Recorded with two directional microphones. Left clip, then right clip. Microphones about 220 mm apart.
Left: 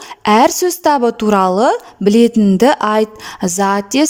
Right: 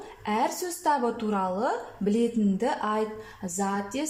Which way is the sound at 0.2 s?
45° left (ahead or behind).